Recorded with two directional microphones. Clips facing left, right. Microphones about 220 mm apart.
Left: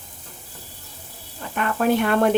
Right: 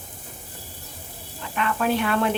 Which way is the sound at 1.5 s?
45° left (ahead or behind).